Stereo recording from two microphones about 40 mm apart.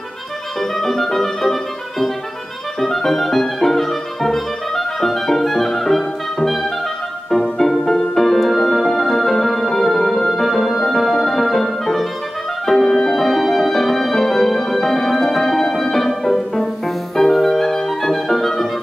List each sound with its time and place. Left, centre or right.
0.6 s music: centre